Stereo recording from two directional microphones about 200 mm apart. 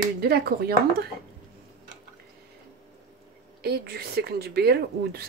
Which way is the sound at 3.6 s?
55° right (ahead or behind).